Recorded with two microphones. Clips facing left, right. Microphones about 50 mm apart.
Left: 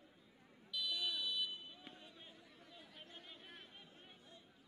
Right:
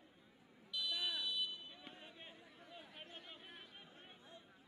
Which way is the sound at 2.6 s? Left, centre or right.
Centre.